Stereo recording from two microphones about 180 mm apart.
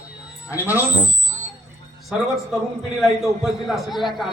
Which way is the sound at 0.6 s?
10° right (ahead or behind).